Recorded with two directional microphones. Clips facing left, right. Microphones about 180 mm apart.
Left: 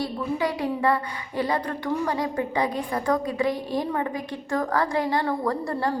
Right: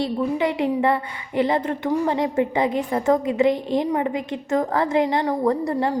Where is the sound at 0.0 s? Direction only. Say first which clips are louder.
Right 4 dB; 20° right (ahead or behind).